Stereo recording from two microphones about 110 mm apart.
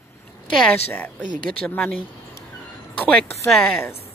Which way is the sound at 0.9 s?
15° left (ahead or behind).